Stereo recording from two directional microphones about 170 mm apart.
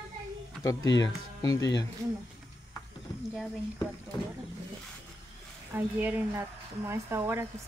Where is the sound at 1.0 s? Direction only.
20° left (ahead or behind).